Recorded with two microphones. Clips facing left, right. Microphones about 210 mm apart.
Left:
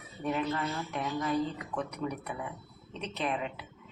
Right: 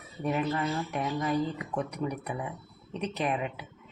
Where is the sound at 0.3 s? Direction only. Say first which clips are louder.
Right 3 dB; 10° right (ahead or behind).